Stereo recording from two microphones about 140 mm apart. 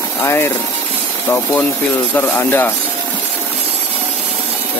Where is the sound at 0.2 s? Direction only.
20° left (ahead or behind).